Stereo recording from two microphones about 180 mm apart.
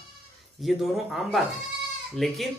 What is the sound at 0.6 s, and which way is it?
A man's voice, centre (ahead or behind).